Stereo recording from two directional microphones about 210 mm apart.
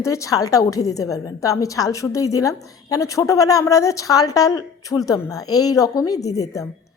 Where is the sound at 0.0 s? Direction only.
15° left (ahead or behind).